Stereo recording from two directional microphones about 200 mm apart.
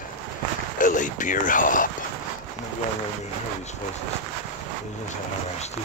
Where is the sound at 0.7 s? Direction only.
40° left (ahead or behind).